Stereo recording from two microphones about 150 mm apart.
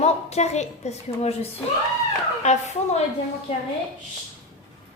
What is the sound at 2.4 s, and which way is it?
Speech, 50° left (ahead or behind).